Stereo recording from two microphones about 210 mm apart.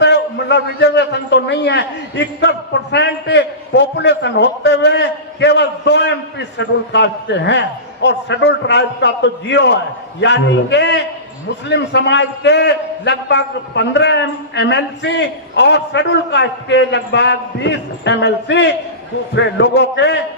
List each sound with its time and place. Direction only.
0.0 s a man's voice: 55° left (ahead or behind)